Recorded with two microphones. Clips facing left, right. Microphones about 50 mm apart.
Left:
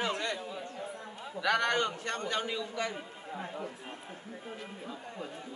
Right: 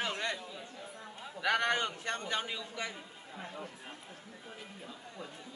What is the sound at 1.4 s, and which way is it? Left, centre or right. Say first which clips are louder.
A man's voice: left 2 dB; centre.